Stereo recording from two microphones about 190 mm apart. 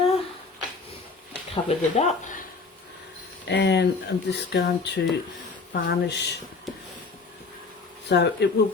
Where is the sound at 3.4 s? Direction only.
65° left (ahead or behind).